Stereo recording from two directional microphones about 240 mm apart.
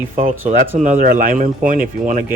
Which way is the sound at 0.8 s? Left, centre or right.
Right.